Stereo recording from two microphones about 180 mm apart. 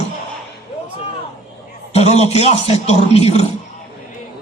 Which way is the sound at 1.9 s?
35° left (ahead or behind).